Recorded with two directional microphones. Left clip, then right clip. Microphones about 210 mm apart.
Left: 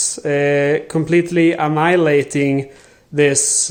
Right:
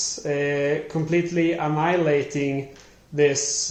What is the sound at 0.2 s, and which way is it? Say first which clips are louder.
Speech: left 9 dB; 50° left (ahead or behind).